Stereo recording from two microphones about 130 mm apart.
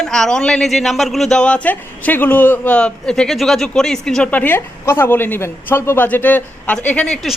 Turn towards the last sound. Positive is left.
turn(degrees=10)  # may be behind; listen again after turning